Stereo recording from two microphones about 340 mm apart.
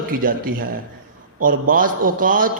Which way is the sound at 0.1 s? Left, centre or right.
Right.